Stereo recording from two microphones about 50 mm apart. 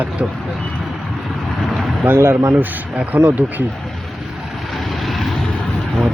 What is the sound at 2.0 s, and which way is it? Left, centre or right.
Speech, right.